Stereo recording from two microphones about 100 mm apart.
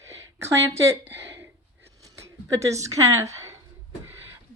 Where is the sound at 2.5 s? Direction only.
30° right (ahead or behind).